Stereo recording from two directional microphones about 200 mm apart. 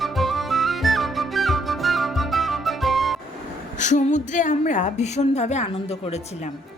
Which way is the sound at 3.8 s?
35° left (ahead or behind).